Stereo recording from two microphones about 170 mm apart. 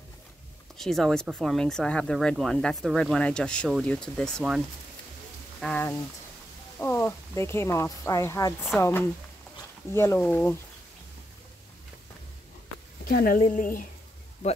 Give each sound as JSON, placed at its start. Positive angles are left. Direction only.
{"t": 0.7, "sound": "speech", "side_deg": 0}
{"t": 5.6, "sound": "speech", "side_deg": 10}
{"t": 9.9, "sound": "speech", "side_deg": 10}
{"t": 13.0, "sound": "speech", "side_deg": 60}